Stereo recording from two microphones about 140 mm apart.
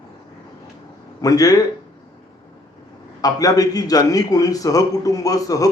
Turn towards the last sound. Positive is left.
turn(degrees=25)  # may be behind; listen again after turning